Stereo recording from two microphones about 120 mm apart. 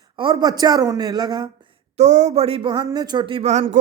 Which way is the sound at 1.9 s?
75° right (ahead or behind).